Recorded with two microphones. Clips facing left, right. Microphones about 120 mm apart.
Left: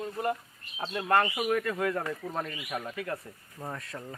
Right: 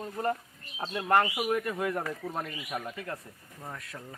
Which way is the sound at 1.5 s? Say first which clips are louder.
Left 1 dB; 20° right (ahead or behind).